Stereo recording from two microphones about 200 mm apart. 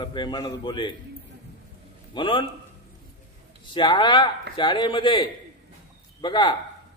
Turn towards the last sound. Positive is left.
turn(degrees=25)  # may be behind; listen again after turning